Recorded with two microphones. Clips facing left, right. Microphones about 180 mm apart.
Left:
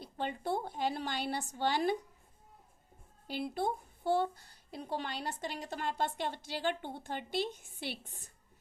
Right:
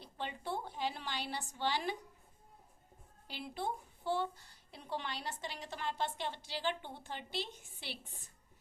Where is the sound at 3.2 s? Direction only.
45° left (ahead or behind).